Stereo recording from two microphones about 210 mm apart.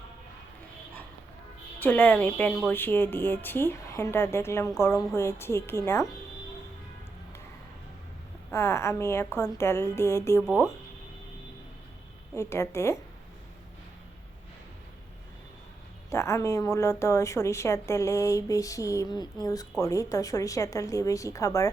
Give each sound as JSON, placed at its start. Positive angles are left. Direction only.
{"t": 1.8, "sound": "a woman's voice", "side_deg": 10}
{"t": 8.4, "sound": "a woman's voice", "side_deg": 15}
{"t": 10.4, "sound": "speech", "side_deg": 0}
{"t": 12.4, "sound": "a woman's voice", "side_deg": 15}
{"t": 16.1, "sound": "a woman's voice", "side_deg": 15}